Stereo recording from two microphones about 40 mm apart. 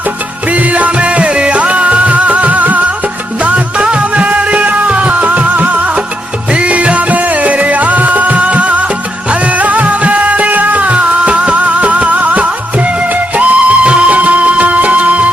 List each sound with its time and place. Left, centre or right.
0.5 s music: right
3.4 s music: right